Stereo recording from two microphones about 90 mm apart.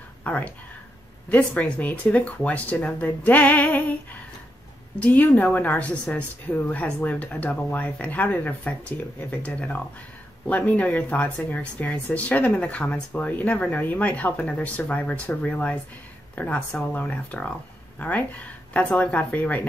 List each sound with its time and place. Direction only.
0.3 s speech: 15° left (ahead or behind)